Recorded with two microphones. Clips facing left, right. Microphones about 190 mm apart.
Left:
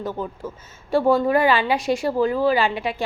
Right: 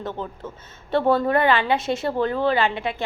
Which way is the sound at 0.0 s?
10° left (ahead or behind).